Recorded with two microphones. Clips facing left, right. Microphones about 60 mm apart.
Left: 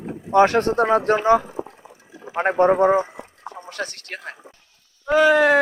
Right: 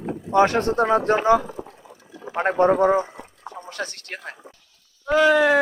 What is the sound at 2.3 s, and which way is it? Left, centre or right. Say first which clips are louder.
Speech: left 1 dB; centre.